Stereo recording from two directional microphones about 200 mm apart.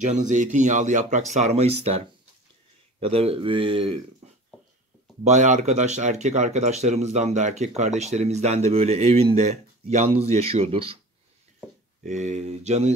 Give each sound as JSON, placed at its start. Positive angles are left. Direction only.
{"t": 0.0, "sound": "speech", "side_deg": -35}
{"t": 5.2, "sound": "speech", "side_deg": -35}
{"t": 12.0, "sound": "speech", "side_deg": -35}